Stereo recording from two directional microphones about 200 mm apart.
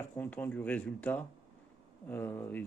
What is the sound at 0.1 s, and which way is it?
Speech, 10° left (ahead or behind).